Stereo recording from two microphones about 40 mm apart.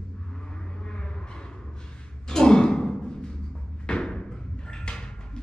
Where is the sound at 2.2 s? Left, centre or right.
Centre.